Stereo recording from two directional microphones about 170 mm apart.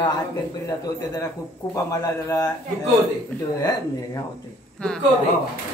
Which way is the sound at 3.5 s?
20° left (ahead or behind).